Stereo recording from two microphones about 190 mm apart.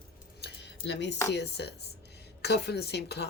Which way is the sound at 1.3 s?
60° left (ahead or behind).